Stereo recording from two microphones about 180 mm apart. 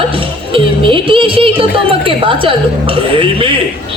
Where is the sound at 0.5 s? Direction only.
30° right (ahead or behind).